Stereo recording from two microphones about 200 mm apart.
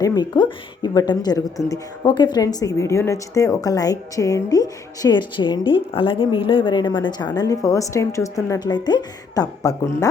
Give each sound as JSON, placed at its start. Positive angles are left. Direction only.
{"t": 0.0, "sound": "a woman's voice", "side_deg": 20}